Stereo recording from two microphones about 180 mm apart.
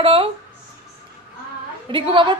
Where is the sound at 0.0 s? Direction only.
30° right (ahead or behind).